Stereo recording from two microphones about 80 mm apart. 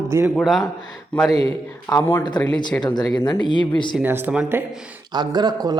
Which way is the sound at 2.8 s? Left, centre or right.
Left.